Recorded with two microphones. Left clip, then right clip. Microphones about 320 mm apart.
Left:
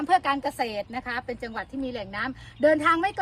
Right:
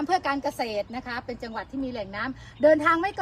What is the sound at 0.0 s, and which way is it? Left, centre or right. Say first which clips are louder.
A woman's voice: left 2 dB; left.